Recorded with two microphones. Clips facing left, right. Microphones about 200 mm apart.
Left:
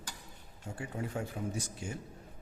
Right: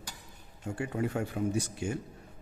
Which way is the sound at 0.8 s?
65° right (ahead or behind).